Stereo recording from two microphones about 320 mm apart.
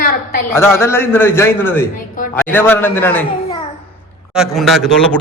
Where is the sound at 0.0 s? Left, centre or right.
Left.